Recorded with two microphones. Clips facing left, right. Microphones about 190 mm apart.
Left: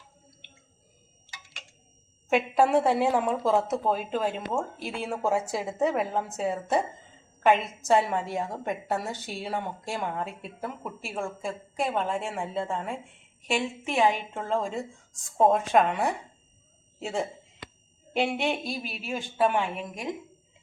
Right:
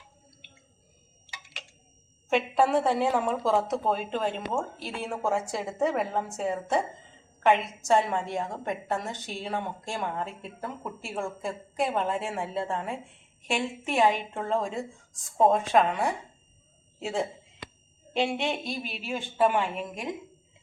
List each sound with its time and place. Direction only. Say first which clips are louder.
2.3 s a woman's voice: left 2 dB; 10° left (ahead or behind)